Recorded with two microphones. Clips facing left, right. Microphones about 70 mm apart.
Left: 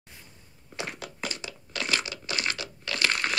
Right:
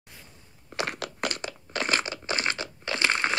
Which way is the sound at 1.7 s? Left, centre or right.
Right.